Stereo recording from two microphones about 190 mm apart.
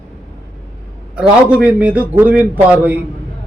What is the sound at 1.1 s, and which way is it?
A man's voice, 5° right (ahead or behind).